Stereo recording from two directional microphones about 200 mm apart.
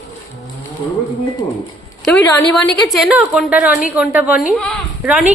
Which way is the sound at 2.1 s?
10° left (ahead or behind).